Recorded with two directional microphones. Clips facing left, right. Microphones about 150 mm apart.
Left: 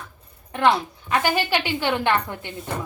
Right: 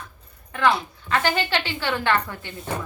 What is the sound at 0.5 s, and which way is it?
A woman's voice, 20° left (ahead or behind).